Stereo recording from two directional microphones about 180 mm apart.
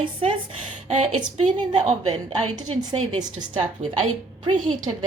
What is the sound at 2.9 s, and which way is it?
A woman's voice, 35° right (ahead or behind).